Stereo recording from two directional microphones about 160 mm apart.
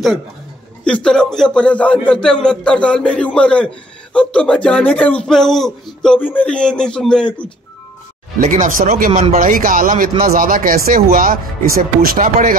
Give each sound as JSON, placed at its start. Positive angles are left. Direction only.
{"t": 0.8, "sound": "speech", "side_deg": 5}
{"t": 8.4, "sound": "speech", "side_deg": -55}